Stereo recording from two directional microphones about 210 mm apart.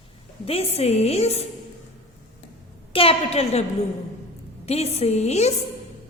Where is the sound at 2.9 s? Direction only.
25° left (ahead or behind).